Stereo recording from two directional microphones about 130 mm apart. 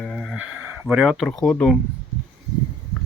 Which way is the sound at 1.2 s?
10° left (ahead or behind).